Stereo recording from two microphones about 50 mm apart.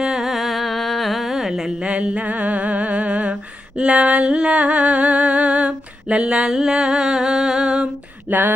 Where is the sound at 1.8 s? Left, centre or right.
Right.